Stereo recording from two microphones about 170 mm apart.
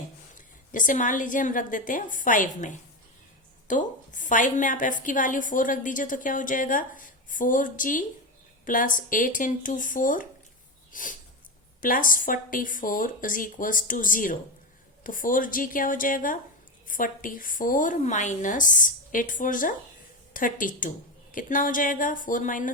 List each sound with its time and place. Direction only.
0.3 s a woman's voice: 50° left (ahead or behind)